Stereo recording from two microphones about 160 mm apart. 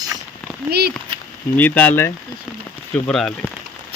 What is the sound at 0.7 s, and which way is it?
Speech, 80° right.